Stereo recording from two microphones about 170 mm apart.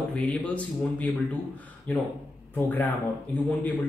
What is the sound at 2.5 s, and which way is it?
Speech, 10° left (ahead or behind).